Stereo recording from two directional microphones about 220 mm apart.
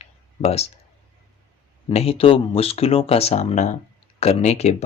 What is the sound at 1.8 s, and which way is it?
Speech, 25° left (ahead or behind).